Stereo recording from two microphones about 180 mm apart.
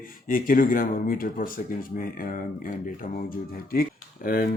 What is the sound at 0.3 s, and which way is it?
Speech, 50° left (ahead or behind).